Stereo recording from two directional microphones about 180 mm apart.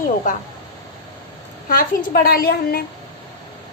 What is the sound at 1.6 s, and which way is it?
A woman's voice, 50° left (ahead or behind).